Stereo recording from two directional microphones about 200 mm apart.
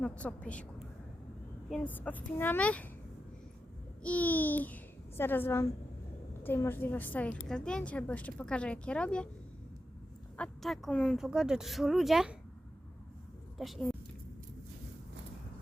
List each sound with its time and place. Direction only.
0.0 s a child's voice: 5° left (ahead or behind)
1.7 s a child's voice: 10° left (ahead or behind)
4.0 s a child's voice: 5° left (ahead or behind)
10.3 s a woman's voice: 5° left (ahead or behind)
13.6 s a woman's voice: centre (ahead or behind)